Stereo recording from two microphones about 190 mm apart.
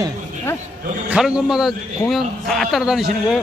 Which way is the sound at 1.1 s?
5° right (ahead or behind).